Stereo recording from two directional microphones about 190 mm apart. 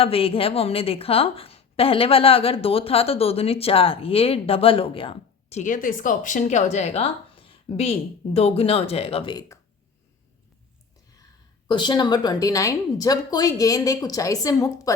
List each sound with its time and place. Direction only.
0.0 s a woman's voice: 30° left (ahead or behind)
11.7 s a woman's voice: 25° left (ahead or behind)